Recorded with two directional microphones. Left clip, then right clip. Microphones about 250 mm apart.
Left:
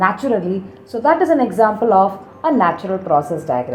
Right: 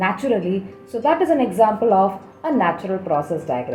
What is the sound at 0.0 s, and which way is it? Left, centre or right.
Speech, left.